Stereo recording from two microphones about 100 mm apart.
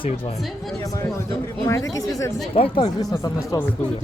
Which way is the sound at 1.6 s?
30° left (ahead or behind).